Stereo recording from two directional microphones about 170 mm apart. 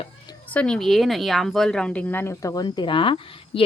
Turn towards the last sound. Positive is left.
turn(degrees=30)  # may be behind; listen again after turning